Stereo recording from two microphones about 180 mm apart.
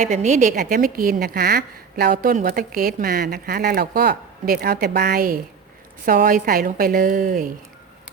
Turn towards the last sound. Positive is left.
turn(degrees=-50)  # may be behind; listen again after turning